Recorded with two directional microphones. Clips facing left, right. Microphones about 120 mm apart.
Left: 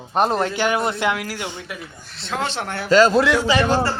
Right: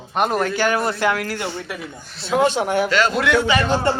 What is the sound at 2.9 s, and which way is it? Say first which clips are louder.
Speech: left 5 dB; 35° left (ahead or behind).